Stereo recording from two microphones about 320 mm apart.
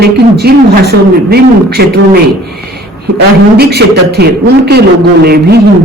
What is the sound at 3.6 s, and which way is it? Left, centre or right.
Speech, right.